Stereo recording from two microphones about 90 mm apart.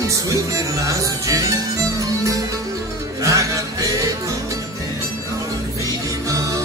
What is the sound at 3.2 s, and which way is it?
Music, 35° right (ahead or behind).